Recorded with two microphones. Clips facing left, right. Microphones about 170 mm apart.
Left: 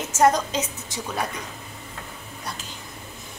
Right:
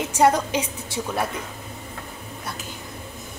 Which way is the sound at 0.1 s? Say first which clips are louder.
Even; 10° right (ahead or behind).